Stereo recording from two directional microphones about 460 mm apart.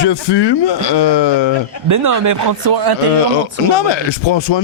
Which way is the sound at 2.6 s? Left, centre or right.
Right.